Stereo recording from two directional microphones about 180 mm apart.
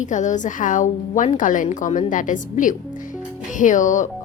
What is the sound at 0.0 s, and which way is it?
Speech, 45° left (ahead or behind).